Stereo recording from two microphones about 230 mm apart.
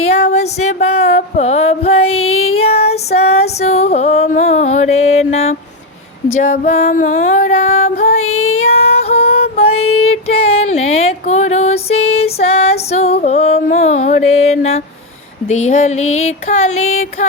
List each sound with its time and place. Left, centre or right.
0.0 s female singing: left
6.4 s music: left
8.3 s child singing: left
8.6 s female singing: left
10.2 s music: left
16.0 s female singing: left
16.5 s music: left